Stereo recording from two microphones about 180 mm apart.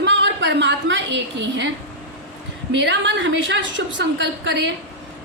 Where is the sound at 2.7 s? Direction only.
80° right.